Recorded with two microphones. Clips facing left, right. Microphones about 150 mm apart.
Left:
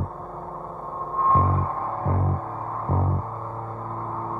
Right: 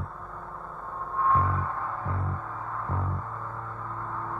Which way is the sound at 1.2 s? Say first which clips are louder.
Left 4 dB; 35° left (ahead or behind).